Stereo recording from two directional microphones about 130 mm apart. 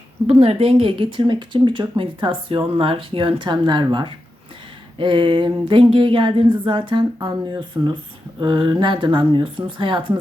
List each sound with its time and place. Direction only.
0.3 s speech: 50° right (ahead or behind)